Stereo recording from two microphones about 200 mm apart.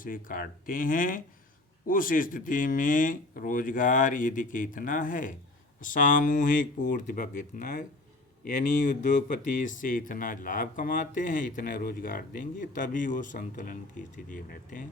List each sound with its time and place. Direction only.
0.0 s speech: 45° left (ahead or behind)